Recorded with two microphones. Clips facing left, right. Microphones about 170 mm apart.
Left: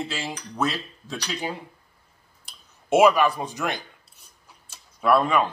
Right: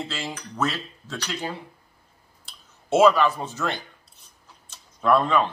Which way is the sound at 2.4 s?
15° left (ahead or behind).